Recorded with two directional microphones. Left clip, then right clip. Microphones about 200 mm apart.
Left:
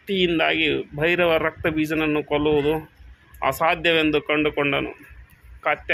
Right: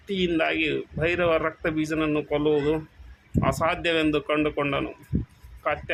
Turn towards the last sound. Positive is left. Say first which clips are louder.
# left 4 dB
turn(degrees=15)  # may be behind; listen again after turning